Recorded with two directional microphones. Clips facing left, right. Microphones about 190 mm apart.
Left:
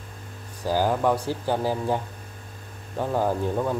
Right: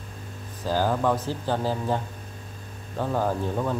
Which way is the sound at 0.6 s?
15° left (ahead or behind).